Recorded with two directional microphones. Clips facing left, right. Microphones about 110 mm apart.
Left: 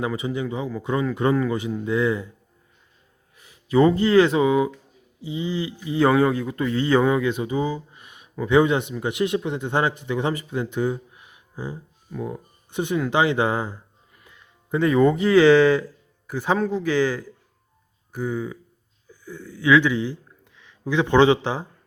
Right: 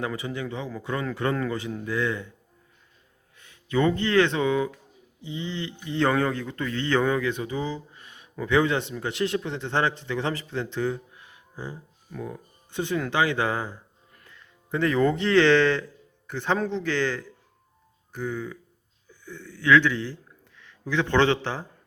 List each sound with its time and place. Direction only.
0.0 s a man's voice: 15° left (ahead or behind)
3.3 s a man's voice: 15° left (ahead or behind)
14.1 s music: 10° left (ahead or behind)
14.9 s a man's voice: 5° left (ahead or behind)